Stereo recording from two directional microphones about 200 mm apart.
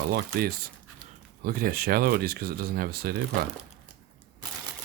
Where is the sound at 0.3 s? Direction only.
45° right (ahead or behind).